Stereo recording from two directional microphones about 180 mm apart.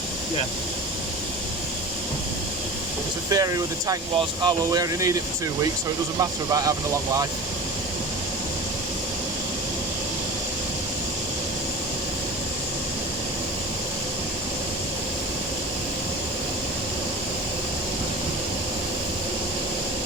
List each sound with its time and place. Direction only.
3.2 s speech: 20° right (ahead or behind)